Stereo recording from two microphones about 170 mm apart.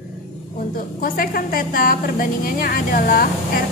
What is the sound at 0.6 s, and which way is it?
A woman's voice, 55° left (ahead or behind).